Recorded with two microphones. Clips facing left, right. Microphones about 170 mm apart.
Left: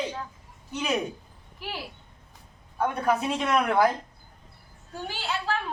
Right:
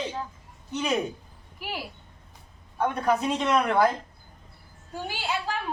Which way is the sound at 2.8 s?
5° left (ahead or behind).